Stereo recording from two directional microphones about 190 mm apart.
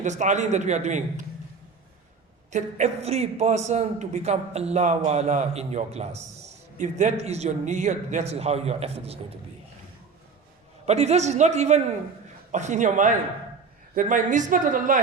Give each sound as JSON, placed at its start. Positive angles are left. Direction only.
{"t": 0.0, "sound": "a man's voice", "side_deg": -40}
{"t": 2.5, "sound": "a man's voice", "side_deg": -40}
{"t": 10.8, "sound": "a man's voice", "side_deg": -35}